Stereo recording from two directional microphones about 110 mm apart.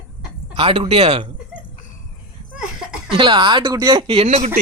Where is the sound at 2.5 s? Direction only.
5° right (ahead or behind).